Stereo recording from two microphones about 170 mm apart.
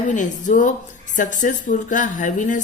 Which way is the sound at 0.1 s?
50° left (ahead or behind).